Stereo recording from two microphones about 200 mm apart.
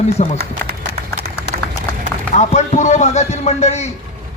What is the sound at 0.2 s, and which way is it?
Speech, 35° left (ahead or behind).